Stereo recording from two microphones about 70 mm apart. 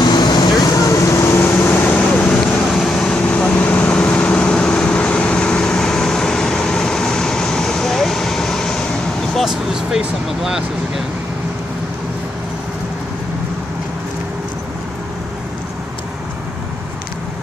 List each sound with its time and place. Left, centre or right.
0.0 s vehicle: left
1.4 s a sound: left
2.0 s vehicle: centre
2.7 s vehicle: centre
9.3 s vehicle: centre